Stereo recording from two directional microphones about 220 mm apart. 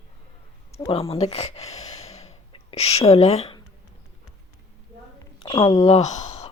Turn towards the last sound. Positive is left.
turn(degrees=30)  # may be behind; listen again after turning